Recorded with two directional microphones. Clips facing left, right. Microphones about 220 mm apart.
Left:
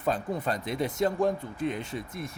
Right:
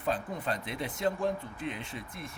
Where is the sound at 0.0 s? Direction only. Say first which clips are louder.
Left 4 dB; 45° left (ahead or behind).